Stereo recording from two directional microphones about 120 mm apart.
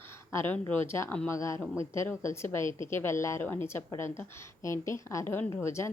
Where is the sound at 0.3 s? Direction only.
20° left (ahead or behind).